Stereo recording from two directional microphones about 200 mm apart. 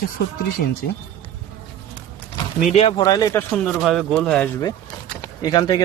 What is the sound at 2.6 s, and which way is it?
Speech, 30° left (ahead or behind).